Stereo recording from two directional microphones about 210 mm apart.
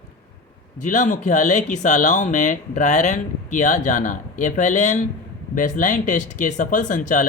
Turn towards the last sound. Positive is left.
turn(degrees=40)  # may be behind; listen again after turning